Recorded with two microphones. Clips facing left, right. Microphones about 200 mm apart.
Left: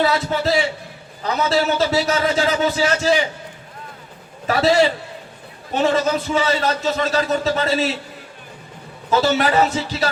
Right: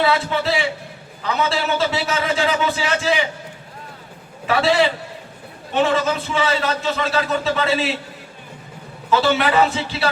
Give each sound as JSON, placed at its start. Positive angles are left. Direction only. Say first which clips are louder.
{"t": 0.0, "sound": "a man's voice", "louder": "even", "side_deg": 40}
{"t": 4.4, "sound": "a man's voice", "louder": "left 2 dB", "side_deg": 40}
{"t": 9.0, "sound": "a man's voice", "louder": "even", "side_deg": 40}